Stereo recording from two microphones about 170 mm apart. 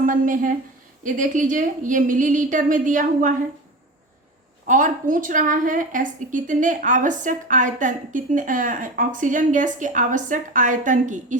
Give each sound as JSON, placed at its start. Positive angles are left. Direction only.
{"t": 0.0, "sound": "a woman's voice", "side_deg": -50}
{"t": 4.6, "sound": "a woman's voice", "side_deg": -50}